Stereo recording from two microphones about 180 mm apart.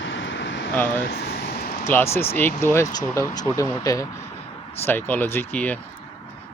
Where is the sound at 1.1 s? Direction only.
55° left (ahead or behind).